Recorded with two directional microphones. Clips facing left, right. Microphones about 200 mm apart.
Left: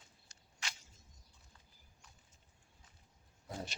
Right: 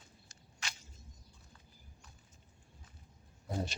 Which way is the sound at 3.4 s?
35° right (ahead or behind).